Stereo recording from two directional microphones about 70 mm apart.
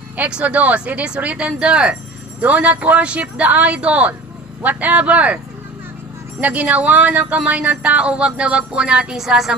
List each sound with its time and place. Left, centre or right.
0.3 s speech: centre
6.4 s speech: right